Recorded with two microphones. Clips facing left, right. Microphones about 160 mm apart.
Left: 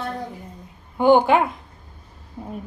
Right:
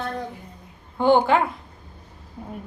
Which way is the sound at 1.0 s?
15° left (ahead or behind).